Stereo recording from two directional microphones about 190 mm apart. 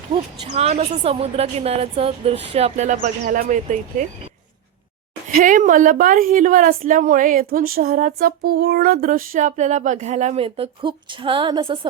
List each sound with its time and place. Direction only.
0.4 s a woman's voice: 35° right (ahead or behind)
5.3 s a woman's voice: 45° right (ahead or behind); by 11.9 s 25° right (ahead or behind)